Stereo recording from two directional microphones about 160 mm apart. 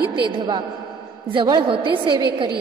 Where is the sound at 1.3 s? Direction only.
30° right (ahead or behind).